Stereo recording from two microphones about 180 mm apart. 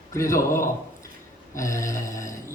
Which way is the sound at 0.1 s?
15° left (ahead or behind).